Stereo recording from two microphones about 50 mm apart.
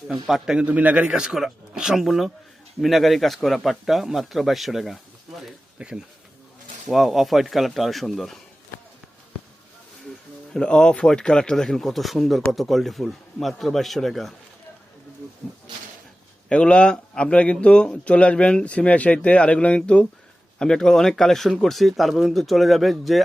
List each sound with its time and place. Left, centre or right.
0.3 s a man's voice: centre
0.5 s speech: right
2.0 s a man's voice: centre
5.8 s speech: right
6.8 s a man's voice: centre
10.5 s a man's voice: centre
16.5 s a man's voice: left
20.6 s a man's voice: centre